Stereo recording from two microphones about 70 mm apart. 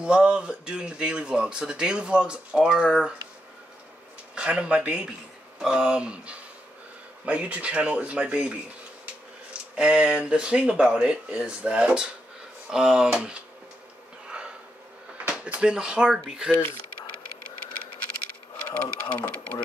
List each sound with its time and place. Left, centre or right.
0.0 s speech: centre
4.4 s speech: centre
9.8 s speech: centre
15.2 s speech: centre
18.7 s speech: left